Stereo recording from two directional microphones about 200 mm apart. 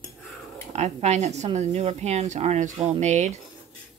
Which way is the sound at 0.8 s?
35° right (ahead or behind).